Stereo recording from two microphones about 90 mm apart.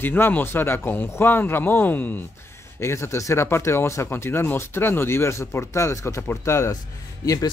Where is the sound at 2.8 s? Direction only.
30° left (ahead or behind).